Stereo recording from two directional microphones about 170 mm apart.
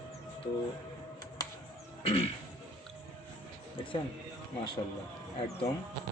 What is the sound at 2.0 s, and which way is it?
Throat clearing, 35° left (ahead or behind).